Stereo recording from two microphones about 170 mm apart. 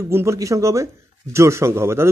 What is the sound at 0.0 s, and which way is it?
Speech, 15° right (ahead or behind).